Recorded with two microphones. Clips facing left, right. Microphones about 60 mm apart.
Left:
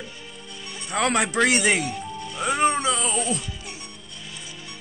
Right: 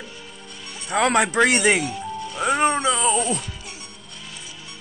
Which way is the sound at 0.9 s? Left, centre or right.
Centre.